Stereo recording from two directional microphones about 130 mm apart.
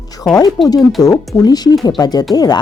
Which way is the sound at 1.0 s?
30° left (ahead or behind).